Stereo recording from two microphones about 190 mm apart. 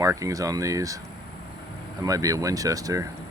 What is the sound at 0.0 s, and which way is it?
Speech, 15° right (ahead or behind).